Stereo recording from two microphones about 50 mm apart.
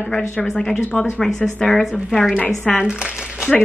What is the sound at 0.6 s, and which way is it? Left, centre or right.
A woman's voice, centre.